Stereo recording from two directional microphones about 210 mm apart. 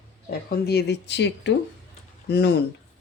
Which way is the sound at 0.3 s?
50° left (ahead or behind).